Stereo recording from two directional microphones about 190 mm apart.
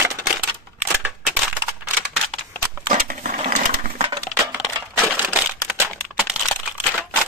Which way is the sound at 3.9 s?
30° right (ahead or behind).